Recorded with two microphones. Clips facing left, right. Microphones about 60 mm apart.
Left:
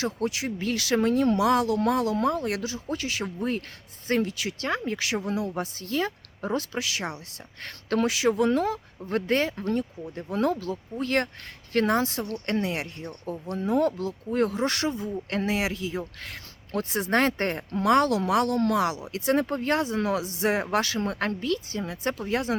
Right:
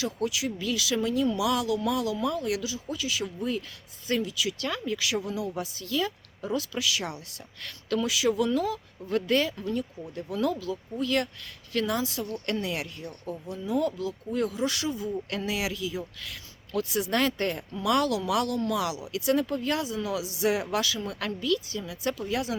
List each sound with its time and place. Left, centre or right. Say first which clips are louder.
0.0 s speech: left 1 dB; left
12.5 s speech: left 4 dB; left
13.5 s speech: left 4 dB; left